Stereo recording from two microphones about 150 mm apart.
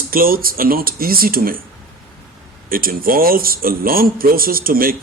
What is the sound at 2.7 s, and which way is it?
A man's voice, 70° right (ahead or behind).